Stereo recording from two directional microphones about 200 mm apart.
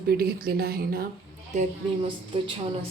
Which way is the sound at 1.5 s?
35° right (ahead or behind).